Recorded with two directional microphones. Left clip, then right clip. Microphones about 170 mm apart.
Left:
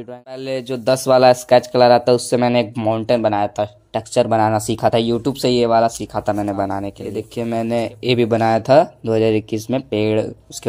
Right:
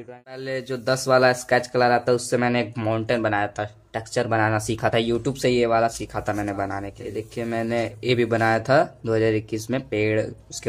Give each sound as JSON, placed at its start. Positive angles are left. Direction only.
{"t": 0.4, "sound": "speech", "side_deg": 30}
{"t": 5.4, "sound": "speech", "side_deg": 30}
{"t": 6.8, "sound": "speech", "side_deg": 35}